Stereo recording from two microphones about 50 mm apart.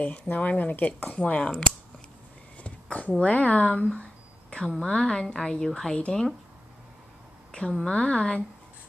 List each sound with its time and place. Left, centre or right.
0.0 s speech: left
2.6 s a sound: left
3.2 s speech: left
7.5 s speech: centre